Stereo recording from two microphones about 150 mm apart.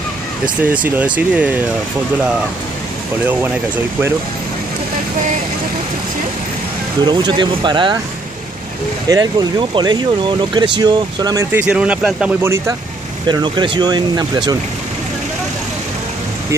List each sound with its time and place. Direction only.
0.7 s speech: 10° right (ahead or behind)
3.3 s speech: 10° right (ahead or behind)
7.1 s speech: 30° right (ahead or behind)
9.1 s speech: 25° right (ahead or behind)
11.5 s speech: 10° right (ahead or behind)
13.3 s speech: 30° right (ahead or behind)